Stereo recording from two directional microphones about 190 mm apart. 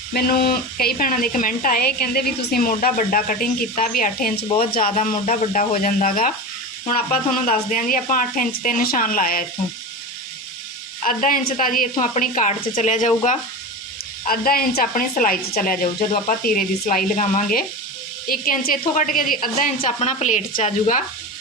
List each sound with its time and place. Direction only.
0.1 s speech: 50° left (ahead or behind)
11.0 s speech: 45° left (ahead or behind)
19.8 s a woman's voice: 35° left (ahead or behind)